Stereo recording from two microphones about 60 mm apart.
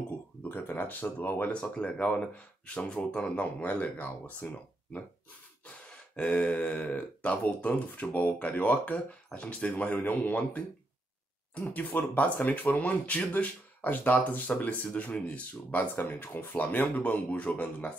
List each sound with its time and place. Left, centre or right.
0.4 s a sound: left
1.1 s speech: left
1.5 s speech: left